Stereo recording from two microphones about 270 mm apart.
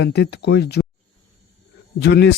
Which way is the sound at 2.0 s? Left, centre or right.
Left.